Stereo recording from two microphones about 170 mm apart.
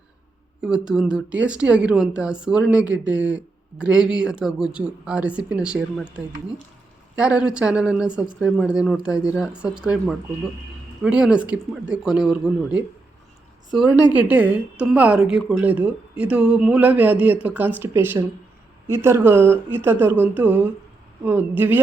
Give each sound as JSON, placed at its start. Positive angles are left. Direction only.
{"t": 0.6, "sound": "speech", "side_deg": -5}
{"t": 7.2, "sound": "speech", "side_deg": -5}
{"t": 14.1, "sound": "speech", "side_deg": -10}